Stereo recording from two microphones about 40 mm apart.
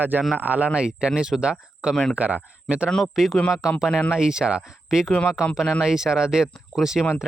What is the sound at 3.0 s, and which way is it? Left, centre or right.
Speech, centre.